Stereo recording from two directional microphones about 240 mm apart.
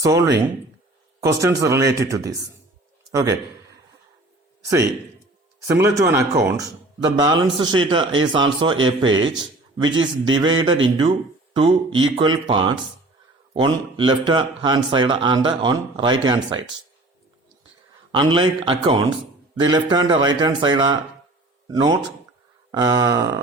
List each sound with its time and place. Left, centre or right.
0.0 s a man's voice: centre
4.6 s a man's voice: centre
18.1 s a man's voice: centre